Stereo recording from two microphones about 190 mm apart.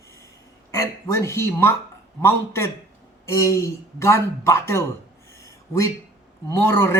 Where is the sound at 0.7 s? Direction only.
15° left (ahead or behind).